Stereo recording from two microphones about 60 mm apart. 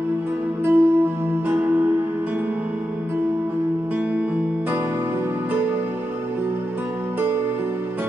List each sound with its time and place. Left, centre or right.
0.7 s music: right